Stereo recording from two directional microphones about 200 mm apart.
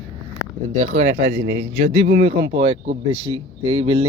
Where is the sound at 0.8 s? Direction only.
35° right (ahead or behind).